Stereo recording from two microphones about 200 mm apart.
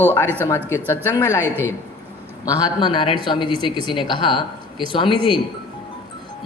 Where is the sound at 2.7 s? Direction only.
25° left (ahead or behind).